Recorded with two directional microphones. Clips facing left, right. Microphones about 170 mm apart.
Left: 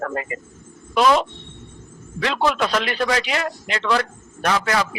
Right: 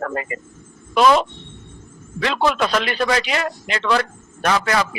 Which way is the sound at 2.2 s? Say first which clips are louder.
Right 1 dB; 75° right (ahead or behind).